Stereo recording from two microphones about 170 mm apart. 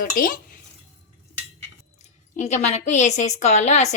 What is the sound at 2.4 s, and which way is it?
A woman's voice, 40° left (ahead or behind).